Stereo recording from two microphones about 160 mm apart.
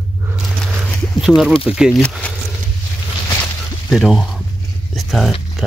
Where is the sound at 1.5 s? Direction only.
35° left (ahead or behind).